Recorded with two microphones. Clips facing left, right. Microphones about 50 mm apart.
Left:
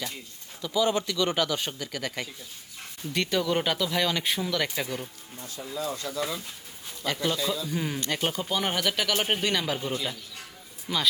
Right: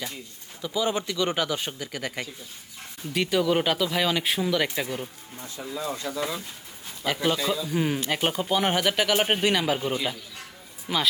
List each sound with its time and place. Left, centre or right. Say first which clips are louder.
0.6 s speech: left 1 dB; centre
5.4 s speech: right 1 dB; right; by 9.7 s centre
10.9 s speech: right 3 dB; right